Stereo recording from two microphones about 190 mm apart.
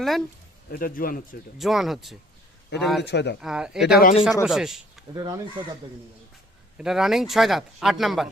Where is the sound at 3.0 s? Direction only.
65° left (ahead or behind).